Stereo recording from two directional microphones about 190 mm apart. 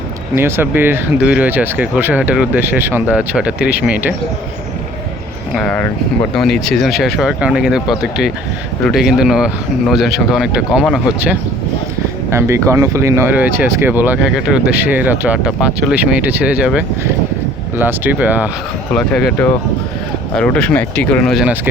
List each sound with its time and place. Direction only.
0.3 s speech: 10° right (ahead or behind)
5.5 s speech: 5° left (ahead or behind)
12.3 s speech: 15° right (ahead or behind)
18.9 s speech: 5° left (ahead or behind)